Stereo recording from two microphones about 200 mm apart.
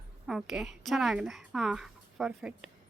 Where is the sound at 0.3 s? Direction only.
Centre (ahead or behind).